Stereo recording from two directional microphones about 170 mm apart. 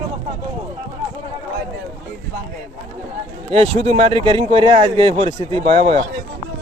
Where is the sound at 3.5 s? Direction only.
35° right (ahead or behind).